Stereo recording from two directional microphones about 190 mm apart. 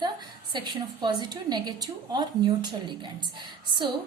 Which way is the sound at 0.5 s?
25° right (ahead or behind).